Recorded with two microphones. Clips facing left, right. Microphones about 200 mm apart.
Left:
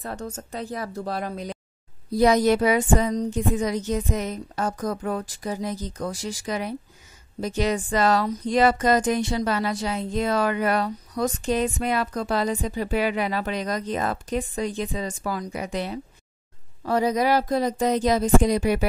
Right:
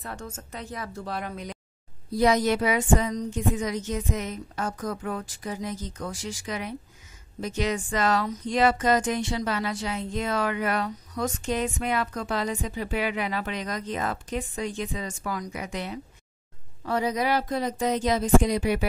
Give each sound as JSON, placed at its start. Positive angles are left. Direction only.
{"t": 0.0, "sound": "speech", "side_deg": 35}